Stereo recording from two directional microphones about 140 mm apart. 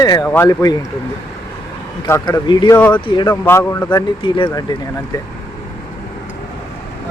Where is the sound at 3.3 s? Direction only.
15° left (ahead or behind).